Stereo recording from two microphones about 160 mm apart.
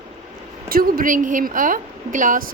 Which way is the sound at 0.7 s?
65° right (ahead or behind).